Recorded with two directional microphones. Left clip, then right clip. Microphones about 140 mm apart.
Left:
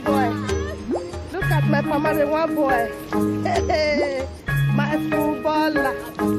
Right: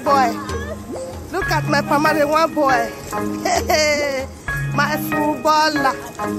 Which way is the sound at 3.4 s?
15° right (ahead or behind).